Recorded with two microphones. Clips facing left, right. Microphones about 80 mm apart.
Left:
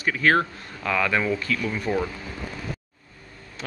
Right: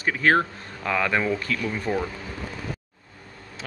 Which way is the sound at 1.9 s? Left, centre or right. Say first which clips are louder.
Left 1 dB; right.